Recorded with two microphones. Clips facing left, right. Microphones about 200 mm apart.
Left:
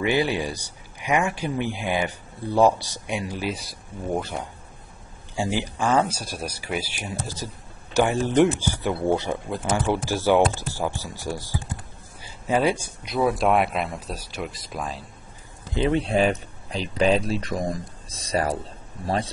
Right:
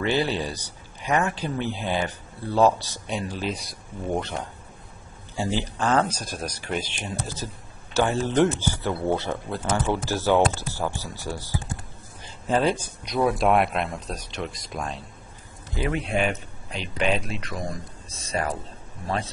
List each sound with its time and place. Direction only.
0.0 s speech: 10° left (ahead or behind)
15.7 s speech: 25° left (ahead or behind)